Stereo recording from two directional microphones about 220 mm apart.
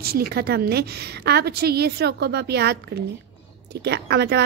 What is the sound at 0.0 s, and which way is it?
A woman's voice, 45° right (ahead or behind).